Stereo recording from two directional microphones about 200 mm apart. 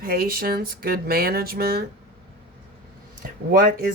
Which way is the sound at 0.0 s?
50° right (ahead or behind).